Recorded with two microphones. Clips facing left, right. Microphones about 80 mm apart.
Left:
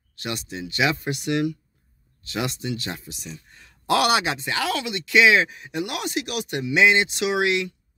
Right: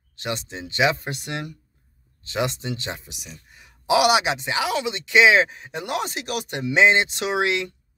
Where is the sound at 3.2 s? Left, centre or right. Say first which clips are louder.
Left 4 dB; centre.